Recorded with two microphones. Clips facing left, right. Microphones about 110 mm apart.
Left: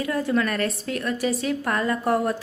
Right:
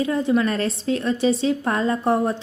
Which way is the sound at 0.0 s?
25° right (ahead or behind).